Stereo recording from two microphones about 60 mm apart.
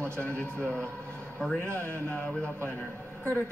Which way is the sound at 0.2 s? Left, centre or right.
Centre.